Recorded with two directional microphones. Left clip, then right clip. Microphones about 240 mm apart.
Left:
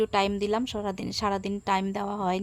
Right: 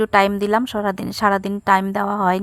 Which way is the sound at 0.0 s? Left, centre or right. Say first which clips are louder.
Right 9 dB; right.